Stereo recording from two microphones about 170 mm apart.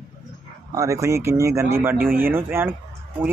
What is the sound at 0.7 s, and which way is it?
Speech, 20° right (ahead or behind).